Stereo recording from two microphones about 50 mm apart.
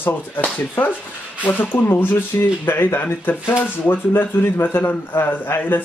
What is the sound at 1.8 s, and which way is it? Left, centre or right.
Speech, left.